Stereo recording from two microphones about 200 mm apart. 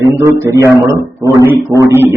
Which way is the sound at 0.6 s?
15° right (ahead or behind).